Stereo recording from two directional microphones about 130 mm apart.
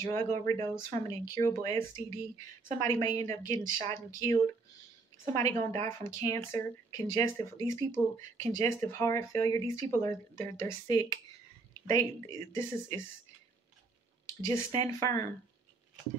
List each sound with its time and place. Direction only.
0.0 s speech: 20° left (ahead or behind)
14.4 s speech: 25° left (ahead or behind)